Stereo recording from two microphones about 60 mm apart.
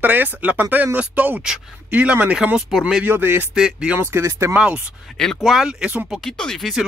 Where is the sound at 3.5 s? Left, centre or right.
Centre.